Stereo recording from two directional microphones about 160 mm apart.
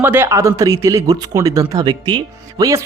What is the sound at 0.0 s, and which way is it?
Speech, 15° right (ahead or behind).